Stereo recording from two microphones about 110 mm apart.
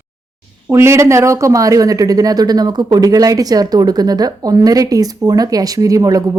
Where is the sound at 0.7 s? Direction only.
25° right (ahead or behind).